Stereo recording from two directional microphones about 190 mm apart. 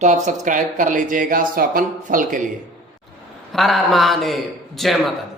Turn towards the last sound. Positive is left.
turn(degrees=0)  # may be behind; listen again after turning